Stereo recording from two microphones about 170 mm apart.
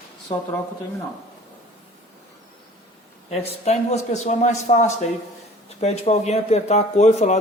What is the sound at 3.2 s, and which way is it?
A man's voice, 40° left (ahead or behind).